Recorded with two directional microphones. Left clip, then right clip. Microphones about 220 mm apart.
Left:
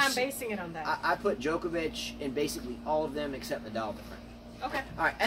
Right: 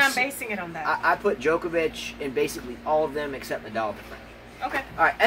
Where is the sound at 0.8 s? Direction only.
5° left (ahead or behind).